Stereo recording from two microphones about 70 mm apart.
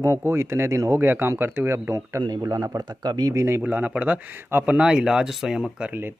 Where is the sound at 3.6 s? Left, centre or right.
Right.